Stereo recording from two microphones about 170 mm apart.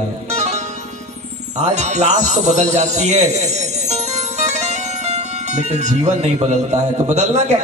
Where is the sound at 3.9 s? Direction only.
40° right (ahead or behind).